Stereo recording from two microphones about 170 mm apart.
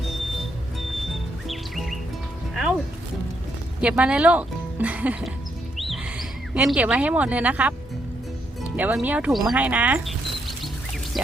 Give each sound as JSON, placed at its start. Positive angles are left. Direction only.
{"t": 1.5, "sound": "music", "side_deg": 0}
{"t": 3.8, "sound": "speech", "side_deg": -5}
{"t": 5.7, "sound": "music", "side_deg": 0}
{"t": 6.5, "sound": "speech", "side_deg": -5}
{"t": 8.7, "sound": "speech", "side_deg": -10}